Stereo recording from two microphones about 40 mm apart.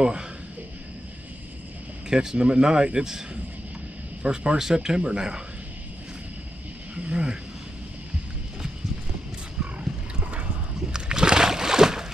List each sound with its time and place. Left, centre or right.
0.0 s a man's voice: right
2.0 s speech: centre
4.2 s speech: right
7.1 s a sound: centre
10.9 s slosh: centre